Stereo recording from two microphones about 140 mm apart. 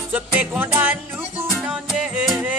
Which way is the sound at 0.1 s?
10° right (ahead or behind).